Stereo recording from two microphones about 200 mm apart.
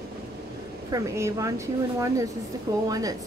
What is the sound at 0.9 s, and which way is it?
A woman's voice, 15° right (ahead or behind).